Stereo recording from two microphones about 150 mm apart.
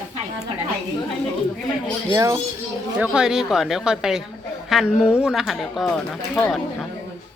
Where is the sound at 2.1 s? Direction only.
20° right (ahead or behind).